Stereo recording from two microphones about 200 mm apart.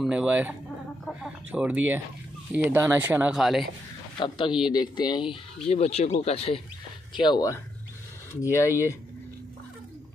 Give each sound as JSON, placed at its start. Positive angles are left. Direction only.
{"t": 0.0, "sound": "speech", "side_deg": -5}
{"t": 4.2, "sound": "speech", "side_deg": 25}